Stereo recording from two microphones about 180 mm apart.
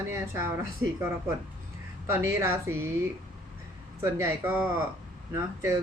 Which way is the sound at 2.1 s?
15° right (ahead or behind).